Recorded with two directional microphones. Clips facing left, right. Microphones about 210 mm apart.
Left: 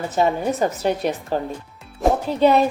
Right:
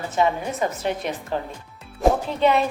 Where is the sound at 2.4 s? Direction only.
40° left (ahead or behind).